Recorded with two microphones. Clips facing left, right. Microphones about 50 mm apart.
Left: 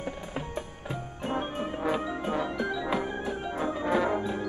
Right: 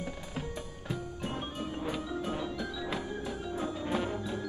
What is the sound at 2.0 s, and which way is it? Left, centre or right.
Music, left.